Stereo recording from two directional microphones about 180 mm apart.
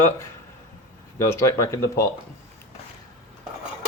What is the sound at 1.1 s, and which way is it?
Speech, 15° left (ahead or behind).